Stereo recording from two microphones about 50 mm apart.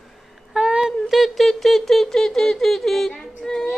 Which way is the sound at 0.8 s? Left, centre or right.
Centre.